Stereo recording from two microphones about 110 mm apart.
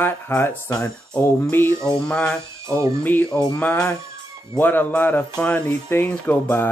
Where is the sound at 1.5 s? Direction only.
20° left (ahead or behind).